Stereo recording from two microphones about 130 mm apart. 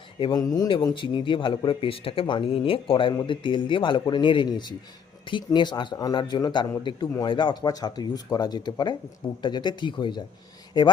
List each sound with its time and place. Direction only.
0.2 s speech: 30° left (ahead or behind)